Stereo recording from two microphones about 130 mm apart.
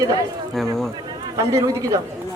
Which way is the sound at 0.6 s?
Centre (ahead or behind).